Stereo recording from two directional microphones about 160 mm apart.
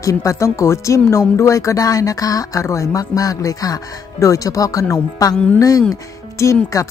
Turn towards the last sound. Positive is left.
turn(degrees=20)  # may be behind; listen again after turning